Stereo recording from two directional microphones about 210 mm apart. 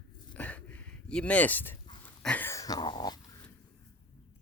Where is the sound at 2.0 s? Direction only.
5° left (ahead or behind).